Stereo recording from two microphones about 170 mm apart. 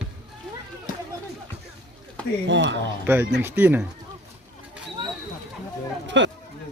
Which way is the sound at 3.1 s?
10° right (ahead or behind).